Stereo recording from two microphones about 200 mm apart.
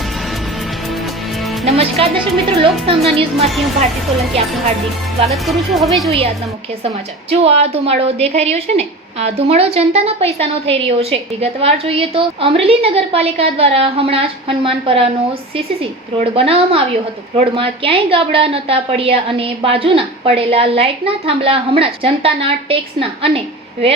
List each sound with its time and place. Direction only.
1.6 s a woman's voice: 30° right (ahead or behind)
3.4 s speech: centre (ahead or behind)
5.3 s speech: centre (ahead or behind)
6.8 s a woman's voice: 30° right (ahead or behind)
16.3 s a woman's voice: 30° right (ahead or behind)